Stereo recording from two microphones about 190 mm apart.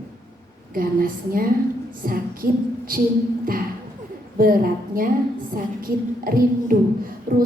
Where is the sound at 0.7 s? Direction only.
50° right (ahead or behind).